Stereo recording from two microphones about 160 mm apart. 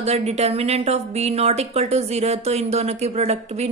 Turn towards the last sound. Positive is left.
turn(degrees=-40)  # may be behind; listen again after turning